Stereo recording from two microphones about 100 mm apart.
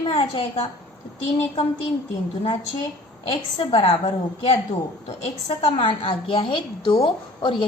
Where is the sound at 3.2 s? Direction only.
55° left (ahead or behind).